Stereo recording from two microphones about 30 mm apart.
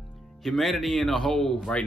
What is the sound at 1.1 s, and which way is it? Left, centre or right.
Speech, left.